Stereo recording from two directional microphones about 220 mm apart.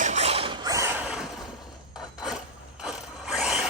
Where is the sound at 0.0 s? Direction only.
30° right (ahead or behind).